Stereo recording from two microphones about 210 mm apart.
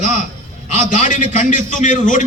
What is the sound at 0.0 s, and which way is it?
A man's voice, 35° left (ahead or behind).